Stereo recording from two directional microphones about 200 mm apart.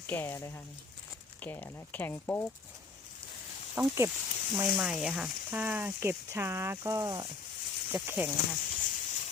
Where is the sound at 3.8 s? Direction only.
15° right (ahead or behind).